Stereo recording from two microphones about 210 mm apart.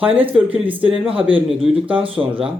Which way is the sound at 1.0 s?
25° right (ahead or behind).